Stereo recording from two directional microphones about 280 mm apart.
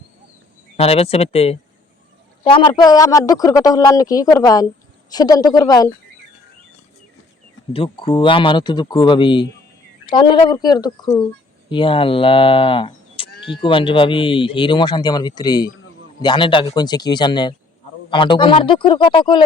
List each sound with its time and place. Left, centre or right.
0.8 s speech: left
7.7 s speech: centre